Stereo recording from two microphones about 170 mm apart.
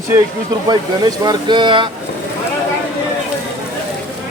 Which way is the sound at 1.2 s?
25° right (ahead or behind).